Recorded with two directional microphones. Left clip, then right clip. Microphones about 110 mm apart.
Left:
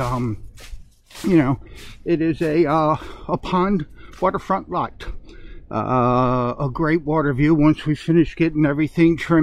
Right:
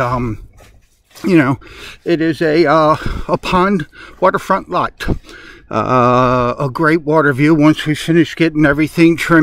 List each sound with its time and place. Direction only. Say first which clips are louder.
0.0 s speech: right 7 dB; 30° right (ahead or behind)